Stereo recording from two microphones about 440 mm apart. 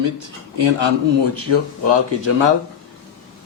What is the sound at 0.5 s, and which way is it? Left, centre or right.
Speech, right.